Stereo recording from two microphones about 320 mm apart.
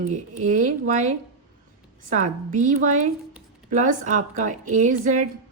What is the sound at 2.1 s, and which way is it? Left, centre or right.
Speech, right.